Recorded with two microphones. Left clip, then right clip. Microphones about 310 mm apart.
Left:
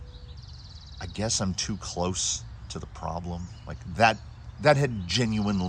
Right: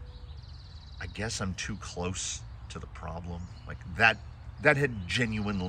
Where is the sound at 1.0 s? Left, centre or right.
Centre.